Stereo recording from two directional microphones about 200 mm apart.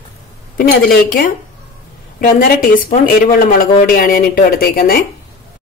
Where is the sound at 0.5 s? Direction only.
50° left (ahead or behind).